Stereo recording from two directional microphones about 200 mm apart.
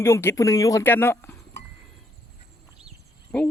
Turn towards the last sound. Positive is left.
turn(degrees=5)  # may be behind; listen again after turning